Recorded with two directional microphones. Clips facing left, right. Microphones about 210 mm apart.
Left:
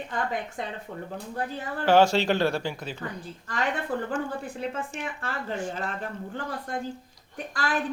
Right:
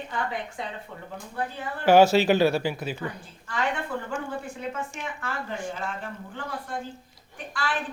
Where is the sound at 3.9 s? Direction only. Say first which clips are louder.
Left 3 dB; 40° left (ahead or behind).